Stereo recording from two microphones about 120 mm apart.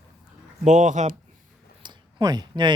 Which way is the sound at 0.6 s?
90° right.